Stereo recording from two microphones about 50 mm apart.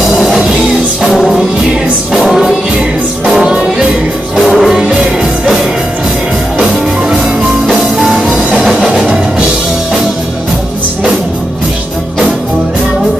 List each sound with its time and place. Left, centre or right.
0.0 s music: centre
3.3 s music: centre
8.1 s music: centre